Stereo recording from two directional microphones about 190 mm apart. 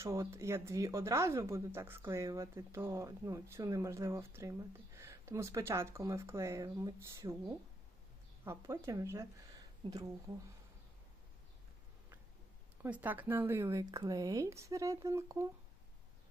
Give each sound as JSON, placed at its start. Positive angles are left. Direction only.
{"t": 0.0, "sound": "speech", "side_deg": -15}
{"t": 12.8, "sound": "speech", "side_deg": -10}